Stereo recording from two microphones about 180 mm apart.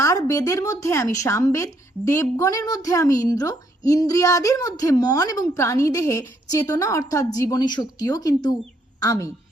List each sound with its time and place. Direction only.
0.0 s a woman's voice: 20° left (ahead or behind)